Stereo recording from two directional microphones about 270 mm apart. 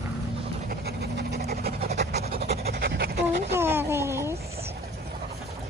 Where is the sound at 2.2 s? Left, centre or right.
Right.